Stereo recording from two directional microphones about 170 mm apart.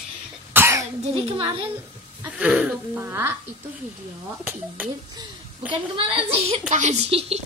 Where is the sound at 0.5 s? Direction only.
15° right (ahead or behind).